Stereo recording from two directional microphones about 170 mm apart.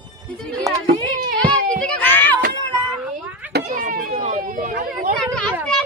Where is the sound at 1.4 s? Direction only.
10° left (ahead or behind).